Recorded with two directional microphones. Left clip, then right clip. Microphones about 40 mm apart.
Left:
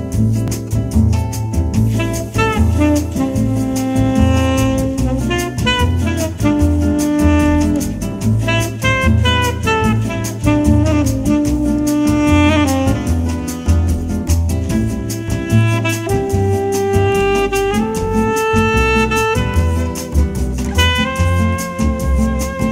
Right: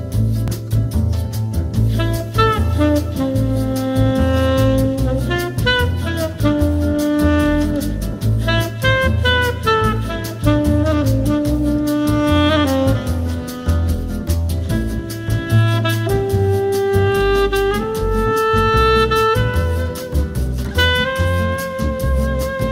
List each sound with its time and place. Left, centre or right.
2.0 s music: centre
3.3 s music: left
7.0 s music: left
15.5 s music: centre
16.1 s music: left
20.7 s music: centre